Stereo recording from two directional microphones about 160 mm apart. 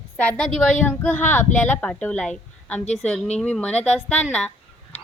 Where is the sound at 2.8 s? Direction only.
45° left (ahead or behind).